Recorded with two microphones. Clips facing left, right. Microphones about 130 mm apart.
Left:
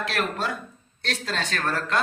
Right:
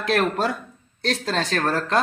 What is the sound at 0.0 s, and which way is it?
Speech, 40° right (ahead or behind).